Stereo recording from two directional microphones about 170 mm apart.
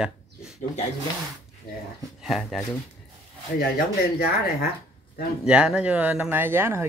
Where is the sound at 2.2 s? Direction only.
Centre (ahead or behind).